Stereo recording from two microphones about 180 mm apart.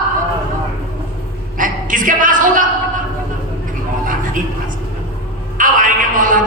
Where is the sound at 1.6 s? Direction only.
50° right (ahead or behind).